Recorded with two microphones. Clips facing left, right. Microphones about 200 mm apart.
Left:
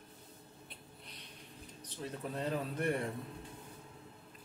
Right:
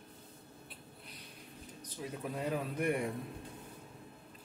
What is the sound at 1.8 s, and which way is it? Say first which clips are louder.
Speech: right 1 dB; 10° right (ahead or behind).